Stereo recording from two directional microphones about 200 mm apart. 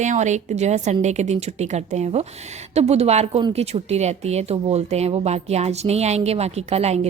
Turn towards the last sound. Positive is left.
turn(degrees=-35)  # may be behind; listen again after turning